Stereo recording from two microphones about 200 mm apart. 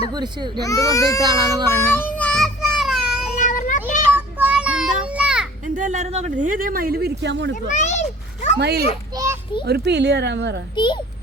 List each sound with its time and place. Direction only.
0.1 s speech: 20° right (ahead or behind)
0.6 s speech: 15° left (ahead or behind)
1.2 s speech: 20° right (ahead or behind)
2.0 s child singing: 5° left (ahead or behind)
3.3 s child singing: 40° left (ahead or behind)
4.1 s children playing: 10° right (ahead or behind)
5.7 s speech: 40° right (ahead or behind); by 7.5 s 65° right (ahead or behind)
7.7 s children playing: 35° left (ahead or behind)
8.5 s speech: 55° right (ahead or behind)
9.1 s children playing: 15° right (ahead or behind)
9.6 s speech: 55° right (ahead or behind)
10.8 s a child's voice: 25° left (ahead or behind)